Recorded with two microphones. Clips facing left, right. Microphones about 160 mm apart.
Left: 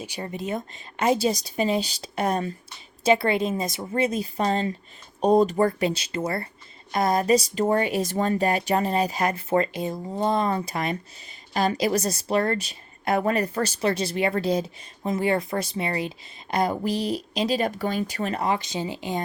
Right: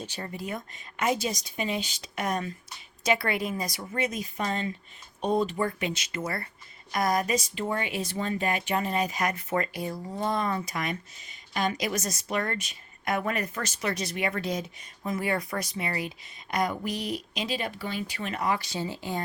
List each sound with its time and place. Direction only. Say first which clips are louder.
0.0 s a woman's voice: left 4 dB; 15° left (ahead or behind)